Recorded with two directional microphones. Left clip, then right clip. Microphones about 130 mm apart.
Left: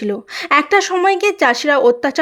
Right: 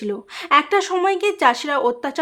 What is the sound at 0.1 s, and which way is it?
Speech, 35° left (ahead or behind).